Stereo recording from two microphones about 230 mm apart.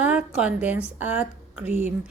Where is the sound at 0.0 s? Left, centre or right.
Centre.